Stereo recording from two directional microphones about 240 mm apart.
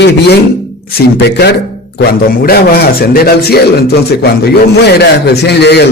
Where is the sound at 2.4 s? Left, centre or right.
Left.